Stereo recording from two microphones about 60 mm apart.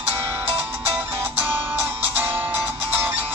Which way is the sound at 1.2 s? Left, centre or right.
Right.